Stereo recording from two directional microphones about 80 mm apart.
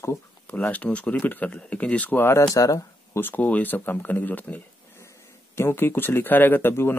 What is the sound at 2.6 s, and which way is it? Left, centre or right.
Speech, left.